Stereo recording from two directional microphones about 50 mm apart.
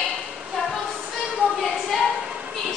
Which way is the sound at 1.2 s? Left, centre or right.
Right.